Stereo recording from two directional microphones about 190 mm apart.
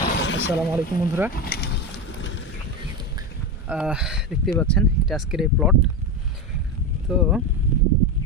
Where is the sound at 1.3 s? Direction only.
55° left (ahead or behind); by 2.4 s 75° left (ahead or behind).